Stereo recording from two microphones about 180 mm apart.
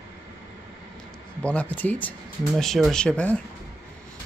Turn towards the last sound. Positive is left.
turn(degrees=5)  # may be behind; listen again after turning